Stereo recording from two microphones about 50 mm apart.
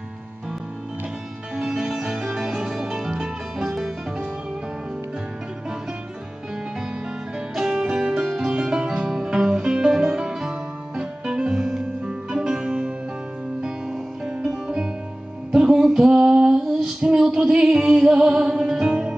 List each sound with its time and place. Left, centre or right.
1.6 s music: centre
7.3 s music: centre
16.1 s female singing: right